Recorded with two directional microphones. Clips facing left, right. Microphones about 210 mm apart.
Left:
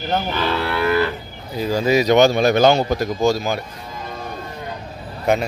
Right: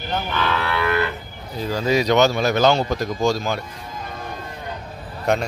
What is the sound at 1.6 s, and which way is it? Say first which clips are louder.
A man's voice: left 3 dB; 10° left (ahead or behind).